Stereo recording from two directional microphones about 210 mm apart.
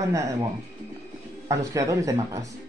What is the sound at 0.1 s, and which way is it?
Speech, 15° right (ahead or behind).